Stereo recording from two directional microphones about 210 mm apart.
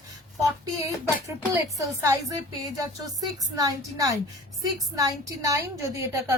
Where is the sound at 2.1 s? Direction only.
15° right (ahead or behind).